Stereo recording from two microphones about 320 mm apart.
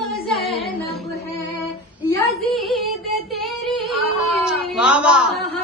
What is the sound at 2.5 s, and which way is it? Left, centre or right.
Speech, centre.